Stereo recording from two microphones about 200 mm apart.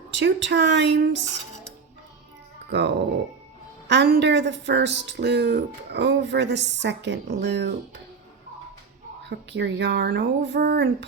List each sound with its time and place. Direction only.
0.1 s speech: 60° right (ahead or behind)
2.6 s speech: 60° right (ahead or behind)
9.2 s speech: 60° right (ahead or behind)